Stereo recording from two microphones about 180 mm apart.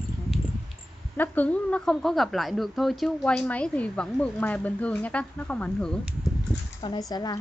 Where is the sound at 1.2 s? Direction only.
10° left (ahead or behind).